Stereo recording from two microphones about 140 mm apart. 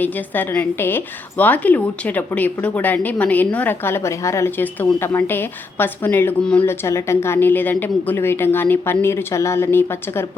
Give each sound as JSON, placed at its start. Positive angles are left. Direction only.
{"t": 0.0, "sound": "a woman's voice", "side_deg": 10}